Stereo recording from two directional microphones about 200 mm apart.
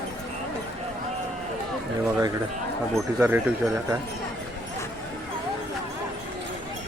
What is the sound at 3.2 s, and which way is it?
Speech, 10° right (ahead or behind).